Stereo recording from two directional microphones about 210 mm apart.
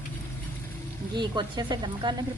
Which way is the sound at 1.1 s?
20° right (ahead or behind).